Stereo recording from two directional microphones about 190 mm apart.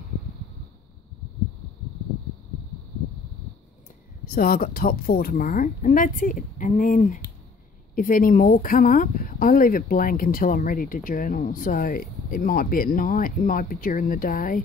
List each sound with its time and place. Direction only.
4.3 s speech: 50° left (ahead or behind)